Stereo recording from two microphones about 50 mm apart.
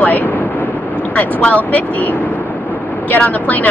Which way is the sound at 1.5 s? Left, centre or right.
Left.